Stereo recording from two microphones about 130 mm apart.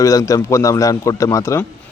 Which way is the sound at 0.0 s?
25° left (ahead or behind).